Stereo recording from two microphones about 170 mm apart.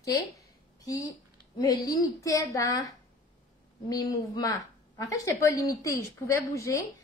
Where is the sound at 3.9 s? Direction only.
20° left (ahead or behind).